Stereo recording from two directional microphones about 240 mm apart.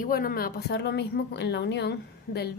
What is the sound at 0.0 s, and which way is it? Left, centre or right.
A woman's voice, left.